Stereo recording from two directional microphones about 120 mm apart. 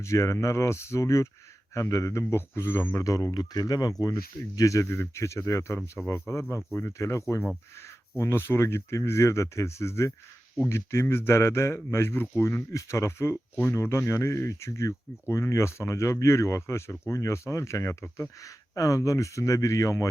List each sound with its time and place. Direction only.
0.0 s speech: 25° left (ahead or behind)
3.0 s speech: 25° left (ahead or behind)